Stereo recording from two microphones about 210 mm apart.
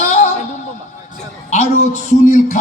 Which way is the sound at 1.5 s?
35° left (ahead or behind).